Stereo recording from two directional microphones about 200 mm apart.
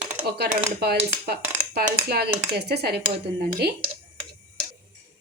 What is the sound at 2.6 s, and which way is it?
Speech, 55° right (ahead or behind).